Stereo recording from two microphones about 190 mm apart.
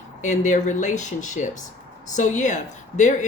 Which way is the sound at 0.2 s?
40° left (ahead or behind).